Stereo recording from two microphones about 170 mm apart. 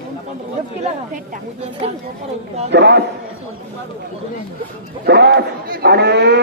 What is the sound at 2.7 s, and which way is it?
Speech, 90° right.